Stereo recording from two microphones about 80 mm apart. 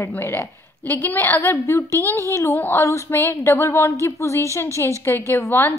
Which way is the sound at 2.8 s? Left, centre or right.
Left.